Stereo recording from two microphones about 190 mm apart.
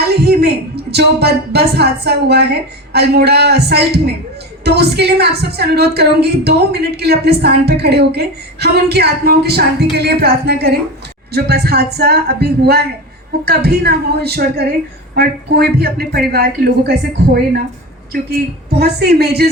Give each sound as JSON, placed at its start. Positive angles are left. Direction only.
{"t": 0.1, "sound": "a woman's voice", "side_deg": -60}
{"t": 18.1, "sound": "a woman's voice", "side_deg": -55}